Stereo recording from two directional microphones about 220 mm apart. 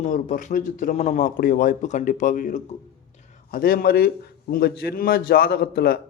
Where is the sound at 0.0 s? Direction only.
35° left (ahead or behind).